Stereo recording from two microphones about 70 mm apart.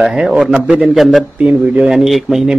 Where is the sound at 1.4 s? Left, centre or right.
Centre.